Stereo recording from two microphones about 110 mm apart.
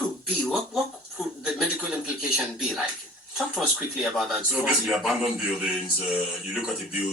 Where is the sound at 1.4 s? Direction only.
10° right (ahead or behind).